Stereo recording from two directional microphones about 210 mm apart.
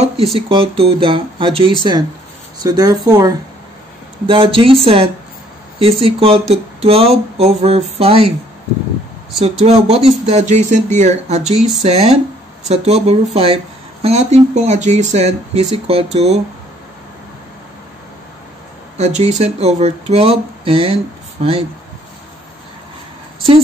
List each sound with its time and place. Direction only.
0.0 s speech: 25° right (ahead or behind)
9.4 s speech: 30° right (ahead or behind)
18.9 s speech: 30° right (ahead or behind)